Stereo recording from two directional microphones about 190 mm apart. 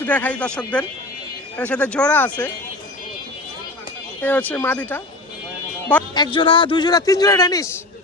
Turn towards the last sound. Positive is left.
turn(degrees=20)  # may be behind; listen again after turning